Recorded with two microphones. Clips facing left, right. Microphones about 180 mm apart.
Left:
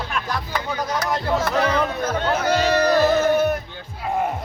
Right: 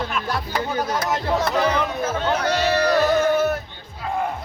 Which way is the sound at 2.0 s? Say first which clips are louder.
Even; centre (ahead or behind).